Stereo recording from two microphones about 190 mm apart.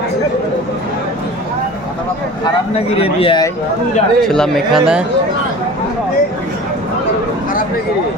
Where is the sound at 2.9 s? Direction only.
30° left (ahead or behind).